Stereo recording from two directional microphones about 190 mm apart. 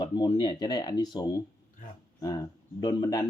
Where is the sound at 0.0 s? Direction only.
25° left (ahead or behind).